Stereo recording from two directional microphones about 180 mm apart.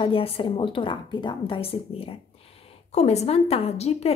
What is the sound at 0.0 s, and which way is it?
A woman's voice, 30° left (ahead or behind).